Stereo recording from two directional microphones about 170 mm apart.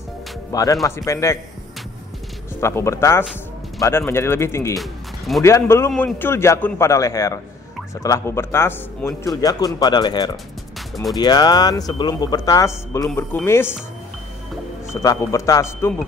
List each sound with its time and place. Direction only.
0.5 s a man's voice: 20° left (ahead or behind)
2.6 s a man's voice: 15° left (ahead or behind)
4.7 s music: centre (ahead or behind)
5.4 s a man's voice: 15° left (ahead or behind)
15.0 s a man's voice: 20° left (ahead or behind)